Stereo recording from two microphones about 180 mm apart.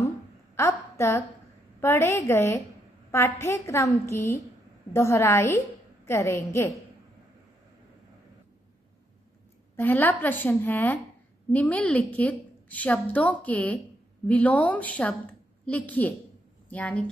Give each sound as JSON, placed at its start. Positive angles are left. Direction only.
{"t": 0.6, "sound": "a woman's voice", "side_deg": 15}
{"t": 9.8, "sound": "a woman's voice", "side_deg": 10}